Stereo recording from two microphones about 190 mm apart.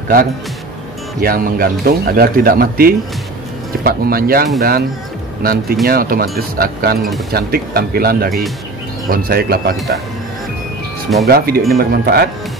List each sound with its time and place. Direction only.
1.2 s speech: 50° right (ahead or behind)
11.2 s speech: 50° right (ahead or behind)